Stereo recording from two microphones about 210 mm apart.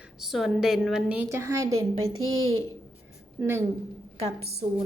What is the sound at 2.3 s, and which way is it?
Speech, 85° right.